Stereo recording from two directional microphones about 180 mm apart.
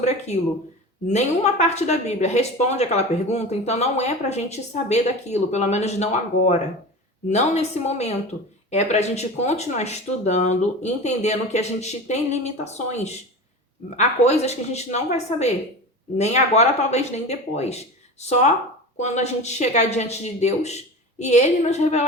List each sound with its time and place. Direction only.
1.0 s a woman's voice: 40° left (ahead or behind)